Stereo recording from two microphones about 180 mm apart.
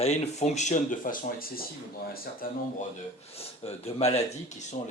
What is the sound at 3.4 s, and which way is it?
Speech, 35° left (ahead or behind).